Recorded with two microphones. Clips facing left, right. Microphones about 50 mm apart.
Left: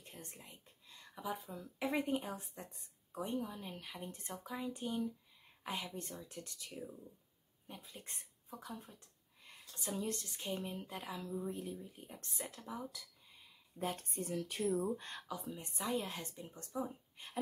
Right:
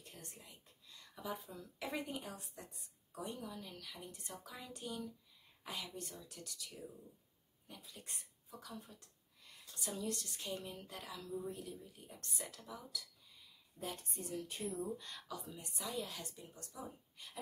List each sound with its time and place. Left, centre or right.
0.0 s whispering: left
1.1 s speech: centre
2.0 s a woman's voice: left
11.4 s a woman's voice: left
14.8 s a woman's voice: left